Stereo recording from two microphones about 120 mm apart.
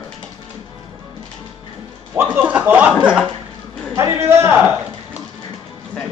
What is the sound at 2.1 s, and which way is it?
Speech, 15° right (ahead or behind).